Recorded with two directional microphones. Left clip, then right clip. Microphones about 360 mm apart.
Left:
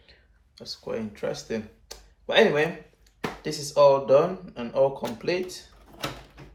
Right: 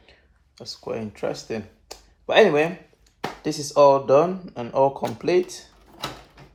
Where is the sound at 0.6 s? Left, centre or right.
Centre.